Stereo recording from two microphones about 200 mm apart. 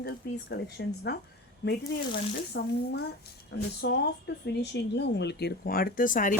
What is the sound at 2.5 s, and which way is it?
Speech, 55° left (ahead or behind).